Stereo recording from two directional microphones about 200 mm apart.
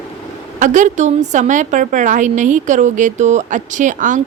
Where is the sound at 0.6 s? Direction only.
40° right (ahead or behind).